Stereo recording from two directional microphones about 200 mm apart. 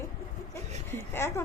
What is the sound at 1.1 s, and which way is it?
Speech, 10° left (ahead or behind).